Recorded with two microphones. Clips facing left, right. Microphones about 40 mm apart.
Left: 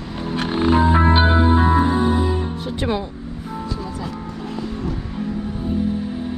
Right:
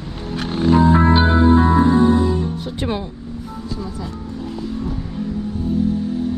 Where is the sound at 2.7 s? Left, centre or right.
Left.